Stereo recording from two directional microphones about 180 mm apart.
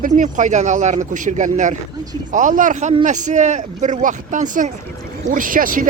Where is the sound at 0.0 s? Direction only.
45° right (ahead or behind).